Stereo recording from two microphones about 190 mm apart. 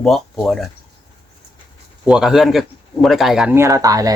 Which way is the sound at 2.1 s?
5° right (ahead or behind).